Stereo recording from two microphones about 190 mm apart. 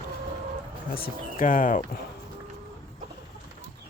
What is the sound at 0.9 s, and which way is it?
Speech, 50° left (ahead or behind).